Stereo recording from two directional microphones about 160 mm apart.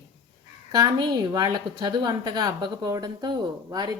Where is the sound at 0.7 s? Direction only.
25° right (ahead or behind).